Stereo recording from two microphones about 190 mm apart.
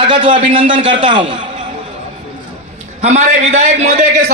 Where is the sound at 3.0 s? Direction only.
35° right (ahead or behind).